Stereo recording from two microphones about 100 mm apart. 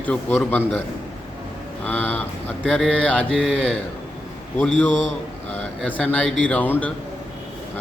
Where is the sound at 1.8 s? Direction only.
15° left (ahead or behind).